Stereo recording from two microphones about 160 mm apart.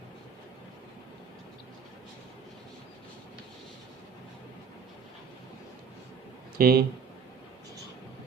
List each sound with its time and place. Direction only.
6.6 s speech: 70° right (ahead or behind)